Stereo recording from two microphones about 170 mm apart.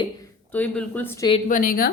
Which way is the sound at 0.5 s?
10° left (ahead or behind).